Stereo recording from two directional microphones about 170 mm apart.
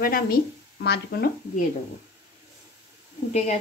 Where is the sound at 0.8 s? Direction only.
75° left (ahead or behind).